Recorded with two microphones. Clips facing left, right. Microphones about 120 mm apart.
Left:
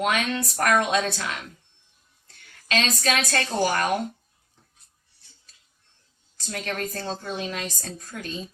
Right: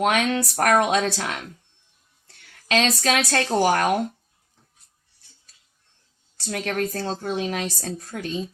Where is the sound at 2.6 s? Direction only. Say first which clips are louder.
Right 4 dB; 75° right (ahead or behind).